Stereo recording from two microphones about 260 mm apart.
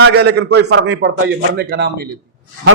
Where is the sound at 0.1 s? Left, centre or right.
Right.